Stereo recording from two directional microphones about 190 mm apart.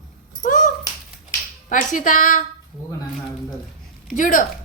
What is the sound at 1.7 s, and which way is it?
Speech, 40° left (ahead or behind).